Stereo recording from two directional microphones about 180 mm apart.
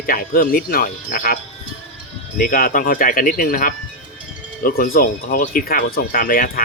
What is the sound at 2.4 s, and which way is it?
Speech, 50° left (ahead or behind).